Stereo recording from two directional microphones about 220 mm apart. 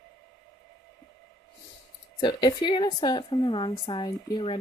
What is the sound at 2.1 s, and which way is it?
A woman's voice, 20° left (ahead or behind).